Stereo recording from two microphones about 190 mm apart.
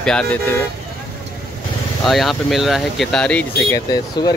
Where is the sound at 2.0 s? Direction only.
Centre (ahead or behind).